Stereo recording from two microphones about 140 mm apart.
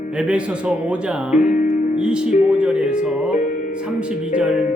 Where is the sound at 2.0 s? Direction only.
5° right (ahead or behind).